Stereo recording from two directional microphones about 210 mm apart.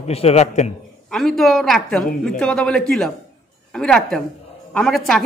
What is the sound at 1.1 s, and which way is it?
A woman's voice, centre (ahead or behind).